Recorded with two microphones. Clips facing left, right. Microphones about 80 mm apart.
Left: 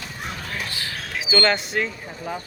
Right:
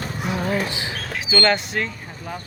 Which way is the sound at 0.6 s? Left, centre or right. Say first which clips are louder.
Right 3 dB; centre.